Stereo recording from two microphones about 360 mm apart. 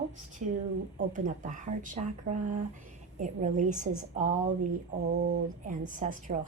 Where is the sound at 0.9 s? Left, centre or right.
Right.